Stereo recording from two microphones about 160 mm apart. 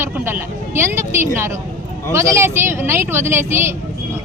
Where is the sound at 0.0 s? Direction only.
15° right (ahead or behind).